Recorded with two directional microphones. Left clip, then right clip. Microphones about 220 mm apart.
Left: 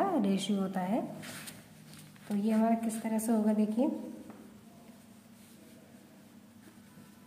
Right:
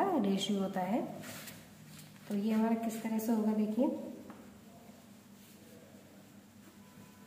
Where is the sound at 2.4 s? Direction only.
20° left (ahead or behind).